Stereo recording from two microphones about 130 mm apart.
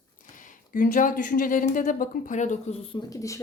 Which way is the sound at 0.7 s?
90° left.